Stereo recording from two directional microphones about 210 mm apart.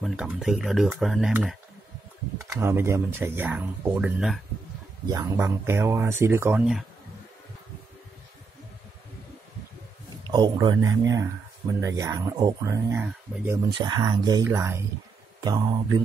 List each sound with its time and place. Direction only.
0.0 s speech: centre (ahead or behind)
5.0 s speech: 15° right (ahead or behind)
10.3 s speech: 20° right (ahead or behind)
13.7 s speech: 20° right (ahead or behind)